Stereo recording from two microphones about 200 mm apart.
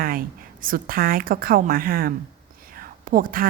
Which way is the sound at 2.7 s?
45° right (ahead or behind).